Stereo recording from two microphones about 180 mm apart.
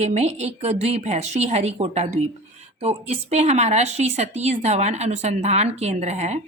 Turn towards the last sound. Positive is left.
turn(degrees=-40)  # may be behind; listen again after turning